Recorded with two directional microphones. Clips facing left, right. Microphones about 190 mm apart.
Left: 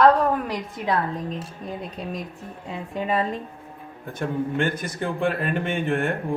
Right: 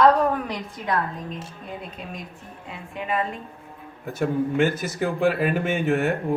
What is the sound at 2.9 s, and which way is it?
Speech, 35° left (ahead or behind).